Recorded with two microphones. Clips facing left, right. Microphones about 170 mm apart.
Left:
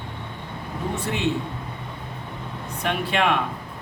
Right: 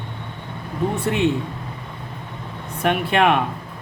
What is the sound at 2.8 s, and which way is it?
Speech, 55° right (ahead or behind).